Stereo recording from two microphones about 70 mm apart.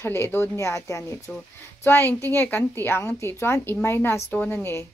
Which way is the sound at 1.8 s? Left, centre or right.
Left.